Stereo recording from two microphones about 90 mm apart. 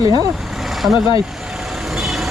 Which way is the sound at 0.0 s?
45° right (ahead or behind).